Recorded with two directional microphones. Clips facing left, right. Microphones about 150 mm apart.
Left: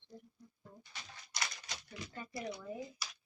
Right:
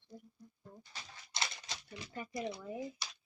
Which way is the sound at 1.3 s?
25° right (ahead or behind).